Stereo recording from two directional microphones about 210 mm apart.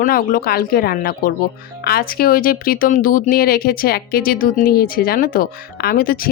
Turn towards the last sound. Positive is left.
turn(degrees=45)  # may be behind; listen again after turning